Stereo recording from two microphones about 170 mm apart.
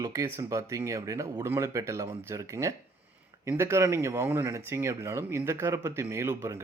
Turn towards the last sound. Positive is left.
turn(degrees=-15)  # may be behind; listen again after turning